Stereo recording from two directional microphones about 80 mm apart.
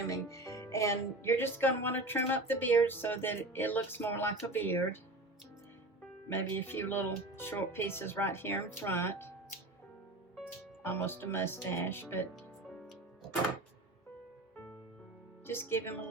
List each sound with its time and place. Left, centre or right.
0.1 s speech: left
6.3 s speech: left
10.8 s speech: left
15.4 s speech: left